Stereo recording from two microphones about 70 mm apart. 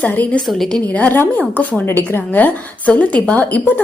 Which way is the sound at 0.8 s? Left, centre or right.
Left.